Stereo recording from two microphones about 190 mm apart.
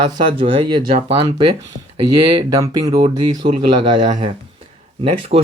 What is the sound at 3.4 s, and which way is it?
Speech, 40° right (ahead or behind).